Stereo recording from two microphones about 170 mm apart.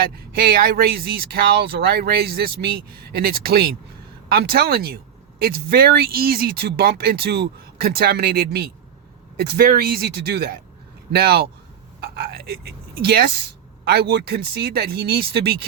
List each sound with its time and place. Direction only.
0.0 s speech: 60° right (ahead or behind)